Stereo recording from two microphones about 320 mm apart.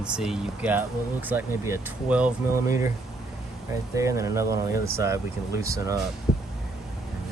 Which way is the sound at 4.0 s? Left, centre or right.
Centre.